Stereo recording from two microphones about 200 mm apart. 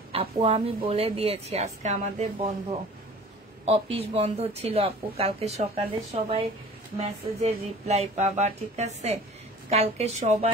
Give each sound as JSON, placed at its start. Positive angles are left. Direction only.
{"t": 0.1, "sound": "speech", "side_deg": -30}